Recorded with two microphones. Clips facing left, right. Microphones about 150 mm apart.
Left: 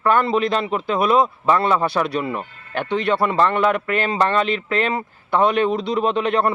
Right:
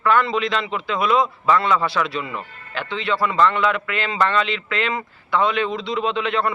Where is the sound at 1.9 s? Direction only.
50° left (ahead or behind).